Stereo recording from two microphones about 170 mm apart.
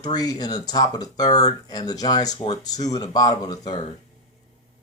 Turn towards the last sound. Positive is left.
turn(degrees=25)  # may be behind; listen again after turning